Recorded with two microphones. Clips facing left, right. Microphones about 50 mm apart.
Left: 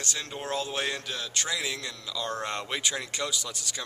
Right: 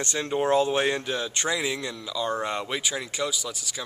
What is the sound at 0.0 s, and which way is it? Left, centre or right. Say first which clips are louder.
A man's voice: right 9 dB; right.